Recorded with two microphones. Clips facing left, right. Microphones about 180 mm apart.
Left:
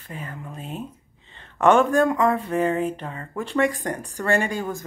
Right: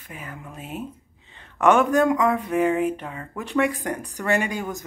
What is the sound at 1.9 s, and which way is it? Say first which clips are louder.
Speech: even; 15° right (ahead or behind).